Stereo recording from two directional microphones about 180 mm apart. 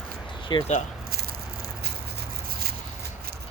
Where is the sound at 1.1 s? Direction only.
60° right (ahead or behind).